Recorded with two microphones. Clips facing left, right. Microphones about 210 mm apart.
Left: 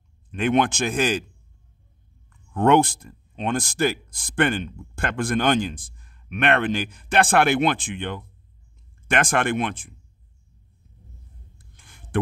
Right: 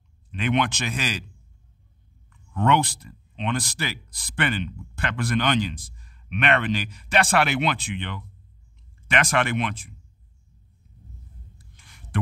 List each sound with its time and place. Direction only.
0.3 s speech: 50° left (ahead or behind)
2.2 s speech: 50° left (ahead or behind)
11.5 s a sound: 50° left (ahead or behind)